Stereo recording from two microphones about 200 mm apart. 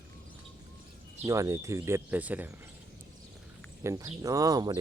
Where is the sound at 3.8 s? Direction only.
15° right (ahead or behind).